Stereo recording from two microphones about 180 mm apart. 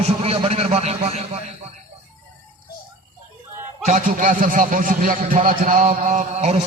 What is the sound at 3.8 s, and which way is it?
A man's voice, 45° right (ahead or behind).